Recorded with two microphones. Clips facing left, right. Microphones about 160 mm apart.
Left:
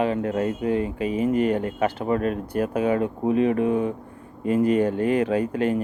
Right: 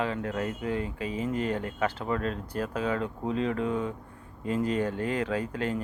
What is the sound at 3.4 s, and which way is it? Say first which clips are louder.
Speech: left 8 dB; 60° left (ahead or behind).